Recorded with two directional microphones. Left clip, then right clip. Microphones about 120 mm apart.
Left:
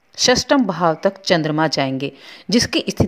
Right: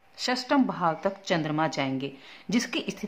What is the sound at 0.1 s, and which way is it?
A woman's voice, 50° left (ahead or behind).